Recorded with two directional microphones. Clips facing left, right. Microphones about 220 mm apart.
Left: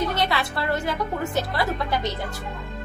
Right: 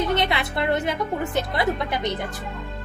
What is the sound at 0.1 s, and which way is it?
Music, 20° right (ahead or behind).